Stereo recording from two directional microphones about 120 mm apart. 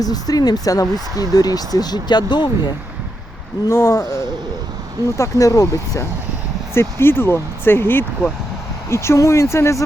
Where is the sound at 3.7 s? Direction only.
25° left (ahead or behind).